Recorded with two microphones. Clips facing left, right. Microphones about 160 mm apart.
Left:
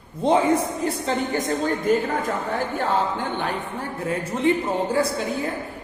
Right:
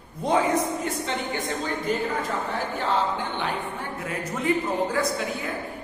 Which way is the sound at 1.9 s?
50° left (ahead or behind).